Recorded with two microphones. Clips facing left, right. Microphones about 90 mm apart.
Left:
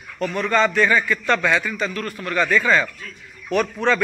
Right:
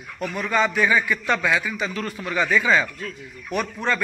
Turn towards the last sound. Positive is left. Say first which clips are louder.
# left 5 dB
turn(degrees=-5)  # may be behind; listen again after turning